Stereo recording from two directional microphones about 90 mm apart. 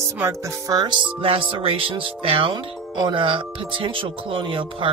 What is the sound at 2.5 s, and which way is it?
Speech, 55° right (ahead or behind).